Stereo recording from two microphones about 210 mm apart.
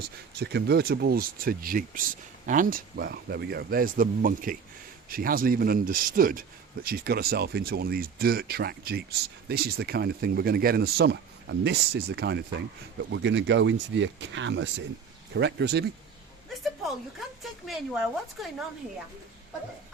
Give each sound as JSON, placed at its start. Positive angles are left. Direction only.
{"t": 0.3, "sound": "speech", "side_deg": -50}
{"t": 16.8, "sound": "speech", "side_deg": 0}